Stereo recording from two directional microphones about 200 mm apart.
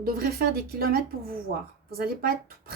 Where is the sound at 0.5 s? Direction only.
50° right (ahead or behind).